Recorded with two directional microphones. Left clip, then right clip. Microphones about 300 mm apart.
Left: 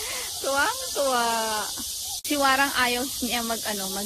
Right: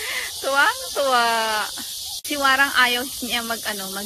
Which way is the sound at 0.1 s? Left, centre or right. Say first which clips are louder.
Right 5 dB; centre.